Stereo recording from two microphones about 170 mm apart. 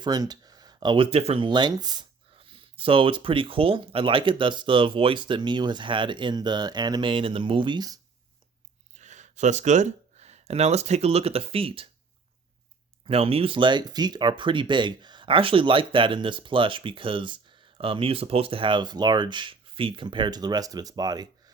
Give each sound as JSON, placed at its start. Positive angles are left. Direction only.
{"t": 0.0, "sound": "speech", "side_deg": -20}
{"t": 9.0, "sound": "speech", "side_deg": -45}
{"t": 13.1, "sound": "speech", "side_deg": -35}